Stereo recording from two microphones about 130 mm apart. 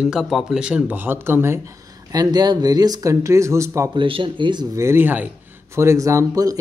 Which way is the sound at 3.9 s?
40° right (ahead or behind).